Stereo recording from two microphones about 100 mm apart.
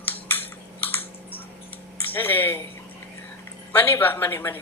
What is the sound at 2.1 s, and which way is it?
Speech, 20° left (ahead or behind).